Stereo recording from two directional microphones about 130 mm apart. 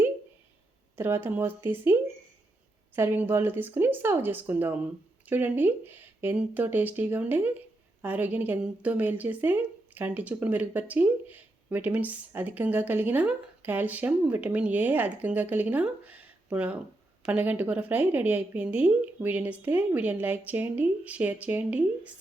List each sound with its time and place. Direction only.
0.9 s a woman's voice: 20° right (ahead or behind)